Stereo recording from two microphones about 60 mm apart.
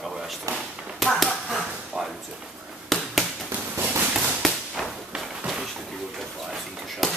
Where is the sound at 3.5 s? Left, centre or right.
Right.